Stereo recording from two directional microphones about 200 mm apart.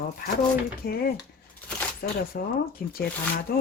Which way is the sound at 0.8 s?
50° left (ahead or behind).